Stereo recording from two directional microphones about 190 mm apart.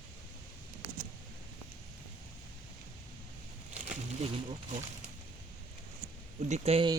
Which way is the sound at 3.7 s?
35° right (ahead or behind).